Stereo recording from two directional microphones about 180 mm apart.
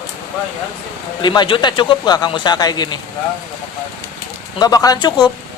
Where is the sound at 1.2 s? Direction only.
25° left (ahead or behind).